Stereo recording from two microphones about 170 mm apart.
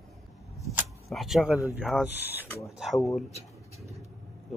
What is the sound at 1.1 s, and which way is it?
Speech, centre (ahead or behind).